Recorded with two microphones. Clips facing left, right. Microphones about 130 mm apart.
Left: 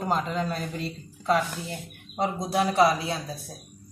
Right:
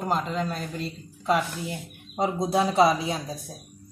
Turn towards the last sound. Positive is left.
turn(degrees=-20)  # may be behind; listen again after turning